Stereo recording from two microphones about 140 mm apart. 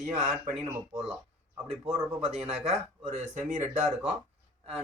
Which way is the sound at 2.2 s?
50° right (ahead or behind).